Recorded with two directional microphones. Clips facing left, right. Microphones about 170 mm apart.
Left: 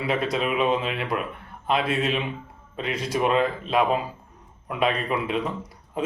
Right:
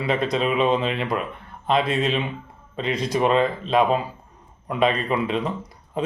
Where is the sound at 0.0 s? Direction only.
10° left (ahead or behind).